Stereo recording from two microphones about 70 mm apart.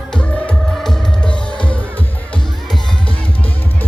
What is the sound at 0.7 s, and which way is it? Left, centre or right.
Music, centre.